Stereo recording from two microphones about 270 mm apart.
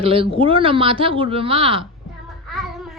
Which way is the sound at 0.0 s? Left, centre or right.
Right.